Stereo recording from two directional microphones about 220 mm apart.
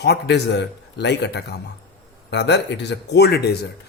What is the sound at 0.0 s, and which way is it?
Speech, 50° left (ahead or behind).